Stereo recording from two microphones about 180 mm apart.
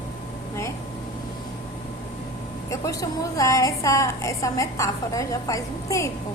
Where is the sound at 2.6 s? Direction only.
20° left (ahead or behind).